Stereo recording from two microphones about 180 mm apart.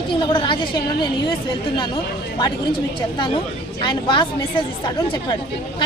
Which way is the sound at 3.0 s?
25° left (ahead or behind).